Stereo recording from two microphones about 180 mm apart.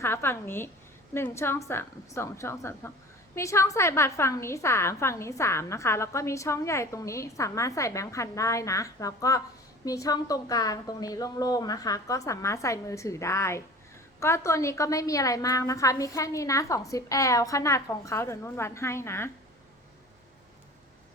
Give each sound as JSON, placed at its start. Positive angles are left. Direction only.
{"t": 0.0, "sound": "a woman's voice", "side_deg": 15}